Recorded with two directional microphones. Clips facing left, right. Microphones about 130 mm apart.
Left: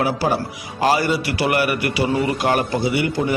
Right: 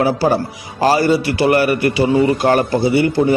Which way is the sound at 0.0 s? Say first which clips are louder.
Right 5 dB; 35° right (ahead or behind).